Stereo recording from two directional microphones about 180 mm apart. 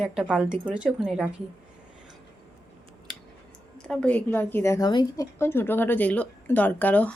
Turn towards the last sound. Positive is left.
turn(degrees=10)  # may be behind; listen again after turning